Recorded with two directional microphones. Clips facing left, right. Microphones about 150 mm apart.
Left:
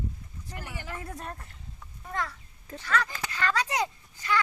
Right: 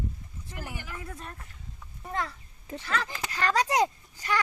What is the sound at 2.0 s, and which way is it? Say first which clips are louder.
Speech: right 1 dB; 25° right (ahead or behind).